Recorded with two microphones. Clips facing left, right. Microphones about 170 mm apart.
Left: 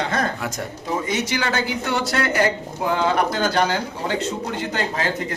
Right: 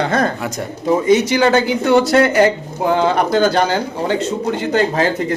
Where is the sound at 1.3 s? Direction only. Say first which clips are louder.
Right 10 dB; 20° right (ahead or behind).